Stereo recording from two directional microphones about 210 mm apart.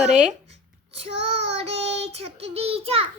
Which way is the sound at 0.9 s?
30° right (ahead or behind).